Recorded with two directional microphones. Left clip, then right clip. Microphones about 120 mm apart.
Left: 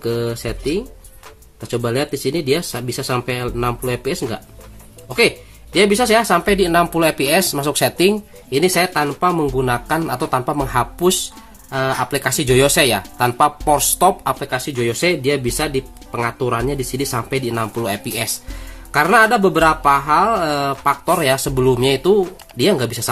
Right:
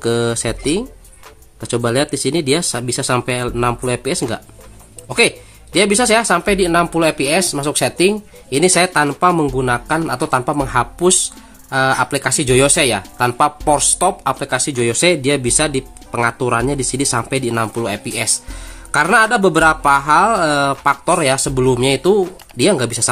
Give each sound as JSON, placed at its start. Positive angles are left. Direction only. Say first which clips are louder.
{"t": 0.0, "sound": "speech", "louder": "right 4 dB", "side_deg": -40}
{"t": 1.6, "sound": "speech", "louder": "right 3 dB", "side_deg": -35}
{"t": 8.5, "sound": "speech", "louder": "right 2 dB", "side_deg": -25}
{"t": 9.6, "sound": "speech", "louder": "right 1 dB", "side_deg": -15}
{"t": 11.7, "sound": "speech", "louder": "right 4 dB", "side_deg": -30}
{"t": 14.4, "sound": "speech", "louder": "right 3 dB", "side_deg": -30}
{"t": 17.9, "sound": "speech", "louder": "right 2 dB", "side_deg": -15}
{"t": 18.9, "sound": "speech", "louder": "even", "side_deg": -30}